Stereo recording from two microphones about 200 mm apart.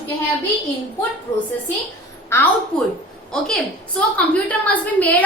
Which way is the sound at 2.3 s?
10° left (ahead or behind).